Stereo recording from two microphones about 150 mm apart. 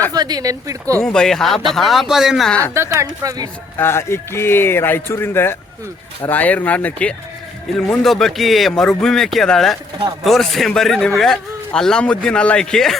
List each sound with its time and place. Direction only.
0.1 s speech: 25° right (ahead or behind)
0.9 s speech: 5° left (ahead or behind)
2.7 s speech: 20° right (ahead or behind)
3.8 s a man's voice: 15° left (ahead or behind)